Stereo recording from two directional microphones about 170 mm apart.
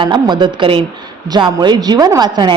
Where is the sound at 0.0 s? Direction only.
25° right (ahead or behind).